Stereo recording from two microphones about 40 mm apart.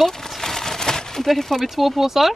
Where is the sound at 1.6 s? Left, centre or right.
Centre.